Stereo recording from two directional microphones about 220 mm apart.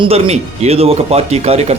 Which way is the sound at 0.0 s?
30° right (ahead or behind).